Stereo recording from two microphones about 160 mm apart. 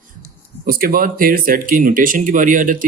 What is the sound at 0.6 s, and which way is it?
Speech, 65° right (ahead or behind).